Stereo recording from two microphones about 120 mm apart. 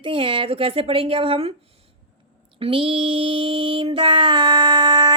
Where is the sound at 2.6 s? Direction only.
50° right (ahead or behind).